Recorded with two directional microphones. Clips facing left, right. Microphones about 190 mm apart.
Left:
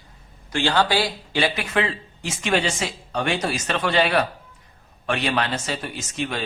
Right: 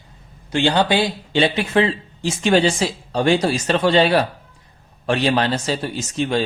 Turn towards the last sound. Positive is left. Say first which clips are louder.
# right 7 dB
turn(degrees=-30)  # may be behind; listen again after turning